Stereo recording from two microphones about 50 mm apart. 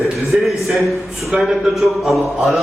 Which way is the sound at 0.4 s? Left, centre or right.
Centre.